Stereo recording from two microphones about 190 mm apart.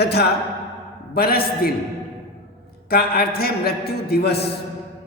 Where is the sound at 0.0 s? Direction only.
55° left (ahead or behind).